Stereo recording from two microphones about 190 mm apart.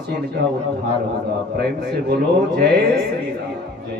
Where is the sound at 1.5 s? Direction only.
60° right (ahead or behind).